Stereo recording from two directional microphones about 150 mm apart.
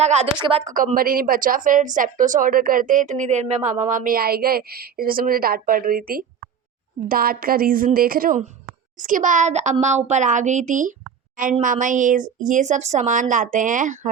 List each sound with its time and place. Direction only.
0.0 s speech: 45° right (ahead or behind)
0.7 s a woman's voice: 65° right (ahead or behind)
9.0 s a woman's voice: 60° right (ahead or behind)